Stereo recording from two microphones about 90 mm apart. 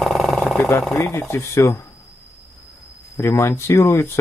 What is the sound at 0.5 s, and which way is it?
Speech, 35° left (ahead or behind).